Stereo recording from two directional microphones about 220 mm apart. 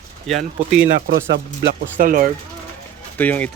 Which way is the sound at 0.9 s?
45° right (ahead or behind).